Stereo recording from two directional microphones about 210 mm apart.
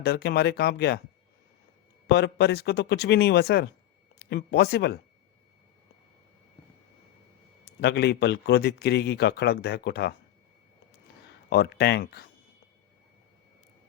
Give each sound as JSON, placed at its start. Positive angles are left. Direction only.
{"t": 0.0, "sound": "a man's voice", "side_deg": 50}
{"t": 2.0, "sound": "a man's voice", "side_deg": 50}
{"t": 7.8, "sound": "a man's voice", "side_deg": 50}
{"t": 11.4, "sound": "a man's voice", "side_deg": 50}